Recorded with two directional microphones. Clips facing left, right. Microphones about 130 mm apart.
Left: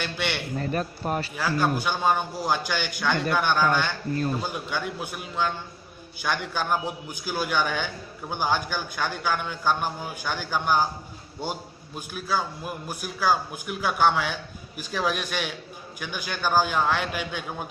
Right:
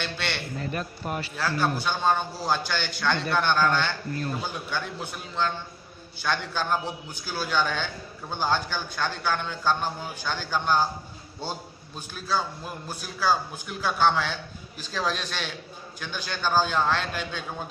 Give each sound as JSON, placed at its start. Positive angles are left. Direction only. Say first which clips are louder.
{"t": 0.0, "sound": "a man's voice", "louder": "left 2 dB", "side_deg": 10}
{"t": 0.6, "sound": "a man's voice", "louder": "left 4 dB", "side_deg": 40}
{"t": 1.3, "sound": "a man's voice", "louder": "even", "side_deg": 10}